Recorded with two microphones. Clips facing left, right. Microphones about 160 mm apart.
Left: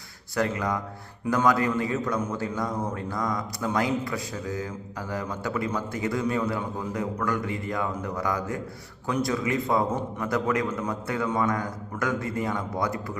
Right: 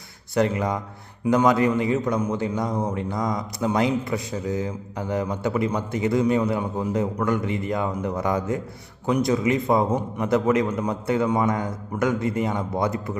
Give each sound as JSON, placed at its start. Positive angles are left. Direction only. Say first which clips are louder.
{"t": 0.3, "sound": "a man's voice", "louder": "right 4 dB", "side_deg": -20}